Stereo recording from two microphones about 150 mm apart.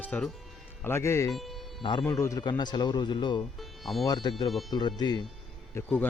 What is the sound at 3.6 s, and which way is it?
Music, centre (ahead or behind).